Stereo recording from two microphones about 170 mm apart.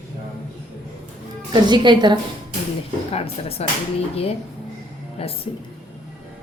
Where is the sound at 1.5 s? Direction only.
25° right (ahead or behind).